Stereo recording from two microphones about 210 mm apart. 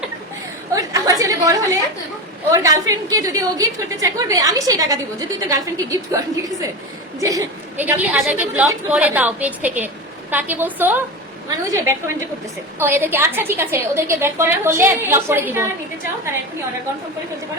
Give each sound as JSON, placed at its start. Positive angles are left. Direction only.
{"t": 0.7, "sound": "a woman's voice", "side_deg": -15}